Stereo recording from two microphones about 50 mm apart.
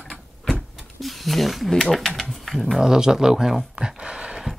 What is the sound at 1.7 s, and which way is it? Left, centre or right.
Speech, centre.